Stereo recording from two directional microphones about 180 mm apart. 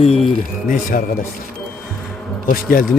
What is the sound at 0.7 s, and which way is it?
Speech, 50° left (ahead or behind).